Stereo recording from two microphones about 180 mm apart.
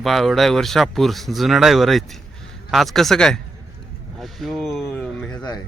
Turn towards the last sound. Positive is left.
turn(degrees=5)  # may be behind; listen again after turning